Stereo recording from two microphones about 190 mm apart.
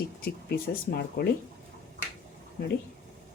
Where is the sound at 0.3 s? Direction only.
55° left (ahead or behind).